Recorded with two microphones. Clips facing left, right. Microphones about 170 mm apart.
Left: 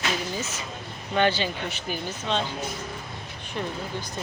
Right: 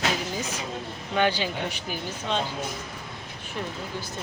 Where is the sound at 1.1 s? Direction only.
10° right (ahead or behind).